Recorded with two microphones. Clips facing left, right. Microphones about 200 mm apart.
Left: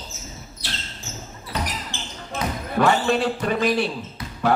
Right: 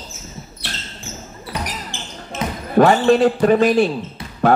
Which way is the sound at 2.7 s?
45° right (ahead or behind).